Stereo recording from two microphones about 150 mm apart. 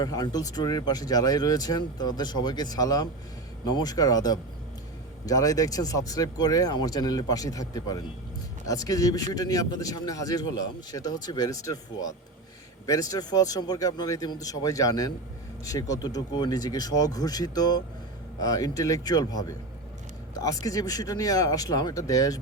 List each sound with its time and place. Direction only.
0.0 s speech: 25° left (ahead or behind)
20.7 s speech: 25° left (ahead or behind)